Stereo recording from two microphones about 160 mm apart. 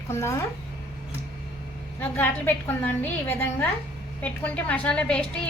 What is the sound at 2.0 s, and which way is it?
A woman's voice, 10° left (ahead or behind).